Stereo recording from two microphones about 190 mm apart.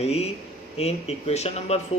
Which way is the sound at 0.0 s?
35° left (ahead or behind).